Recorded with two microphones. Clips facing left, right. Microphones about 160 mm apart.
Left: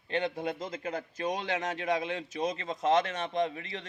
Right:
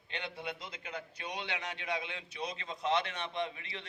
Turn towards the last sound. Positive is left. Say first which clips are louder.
# left 7 dB
turn(degrees=40)  # may be behind; listen again after turning